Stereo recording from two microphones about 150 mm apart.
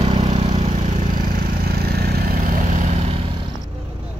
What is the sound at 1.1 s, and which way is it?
Vehicle, 80° right.